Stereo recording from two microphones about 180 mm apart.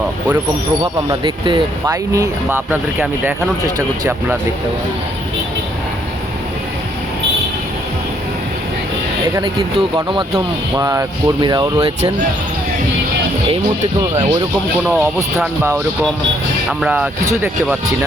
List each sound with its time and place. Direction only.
1.0 s speech: 25° right (ahead or behind)
9.3 s speech: 30° right (ahead or behind)
14.8 s speech: centre (ahead or behind)
16.6 s speech: 5° right (ahead or behind)